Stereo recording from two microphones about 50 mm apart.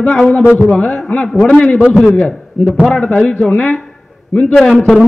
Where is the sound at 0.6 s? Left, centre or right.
Left.